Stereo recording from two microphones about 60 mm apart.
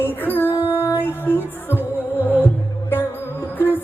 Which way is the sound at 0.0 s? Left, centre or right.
Left.